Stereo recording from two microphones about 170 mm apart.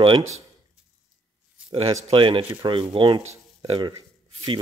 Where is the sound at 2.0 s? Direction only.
35° right (ahead or behind).